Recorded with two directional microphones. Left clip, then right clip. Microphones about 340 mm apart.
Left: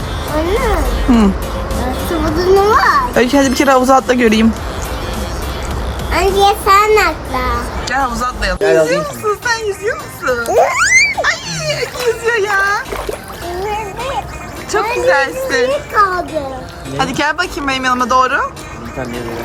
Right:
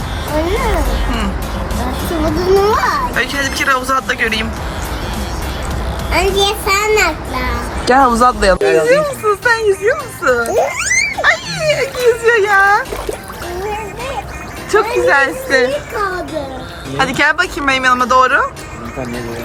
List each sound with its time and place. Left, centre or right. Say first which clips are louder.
0.3 s a child's voice: left 1 dB; centre
3.2 s speech: left 4 dB; centre
6.1 s a child's voice: left 3 dB; centre
14.7 s a child's voice: right 1 dB; centre
17.0 s a woman's voice: right 3 dB; centre